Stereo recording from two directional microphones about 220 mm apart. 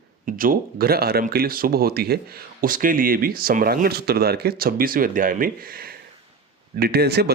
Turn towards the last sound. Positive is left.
turn(degrees=-50)  # may be behind; listen again after turning